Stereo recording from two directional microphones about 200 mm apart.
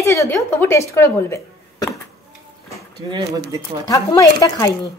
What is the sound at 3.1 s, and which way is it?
Speech, 15° right (ahead or behind).